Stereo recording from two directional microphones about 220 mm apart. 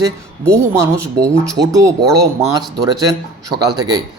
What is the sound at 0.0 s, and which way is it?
A man's voice, 15° right (ahead or behind).